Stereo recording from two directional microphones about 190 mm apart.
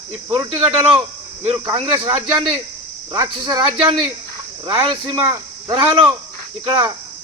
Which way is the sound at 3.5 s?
25° right (ahead or behind).